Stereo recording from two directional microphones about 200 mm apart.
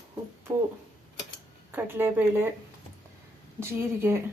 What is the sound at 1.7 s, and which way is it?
Speech, 10° right (ahead or behind).